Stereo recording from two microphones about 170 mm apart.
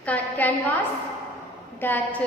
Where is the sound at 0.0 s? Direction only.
10° left (ahead or behind).